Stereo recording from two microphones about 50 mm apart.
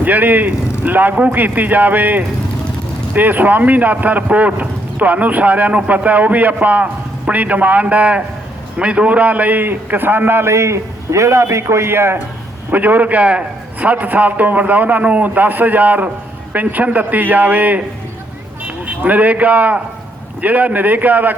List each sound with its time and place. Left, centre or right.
0.0 s a man's voice: right
12.7 s speech: right